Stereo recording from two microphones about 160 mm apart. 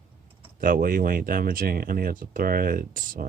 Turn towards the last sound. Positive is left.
turn(degrees=-60)  # may be behind; listen again after turning